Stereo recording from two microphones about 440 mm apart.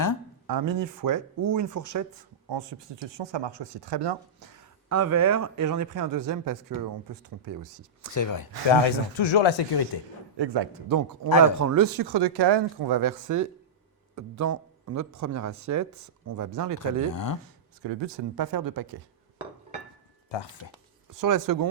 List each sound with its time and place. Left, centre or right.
0.4 s speech: right
2.5 s speech: right
4.9 s speech: right
5.1 s speech: right
8.1 s speech: left
8.7 s speech: left
10.3 s a man's voice: right
11.6 s speech: right
17.1 s speech: left
17.8 s speech: right
20.6 s speech: left
21.1 s speech: right